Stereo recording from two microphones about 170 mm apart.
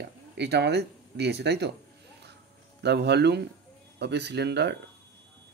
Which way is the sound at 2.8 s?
80° right.